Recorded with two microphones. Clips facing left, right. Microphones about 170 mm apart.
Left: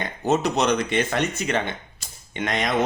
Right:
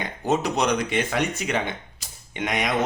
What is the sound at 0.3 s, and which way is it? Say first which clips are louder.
Speech: left 2 dB; 10° right (ahead or behind).